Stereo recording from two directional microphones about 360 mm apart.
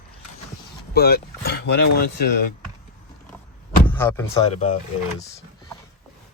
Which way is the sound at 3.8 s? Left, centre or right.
Centre.